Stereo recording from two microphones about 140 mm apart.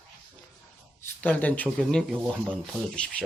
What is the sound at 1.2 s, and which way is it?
Speech, 10° left (ahead or behind).